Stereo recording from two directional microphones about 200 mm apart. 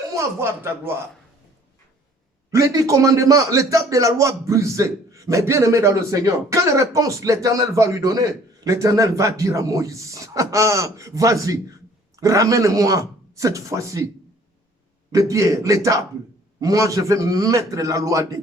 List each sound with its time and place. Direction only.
0.1 s a man's voice: 15° right (ahead or behind)
2.5 s a man's voice: 15° right (ahead or behind)
15.1 s a man's voice: 15° right (ahead or behind)